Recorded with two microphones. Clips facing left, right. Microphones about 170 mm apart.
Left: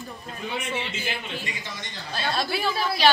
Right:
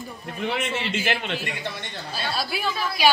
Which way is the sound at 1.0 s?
70° right (ahead or behind).